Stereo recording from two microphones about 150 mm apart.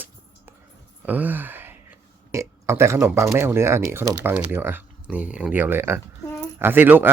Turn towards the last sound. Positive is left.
turn(degrees=-15)  # may be behind; listen again after turning